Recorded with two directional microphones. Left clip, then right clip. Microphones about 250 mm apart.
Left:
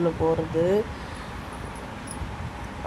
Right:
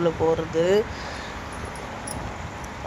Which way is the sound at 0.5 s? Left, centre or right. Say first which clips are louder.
Right 2 dB; centre.